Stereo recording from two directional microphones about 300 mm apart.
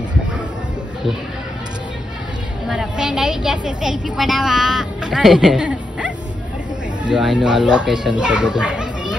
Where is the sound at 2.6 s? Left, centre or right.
Centre.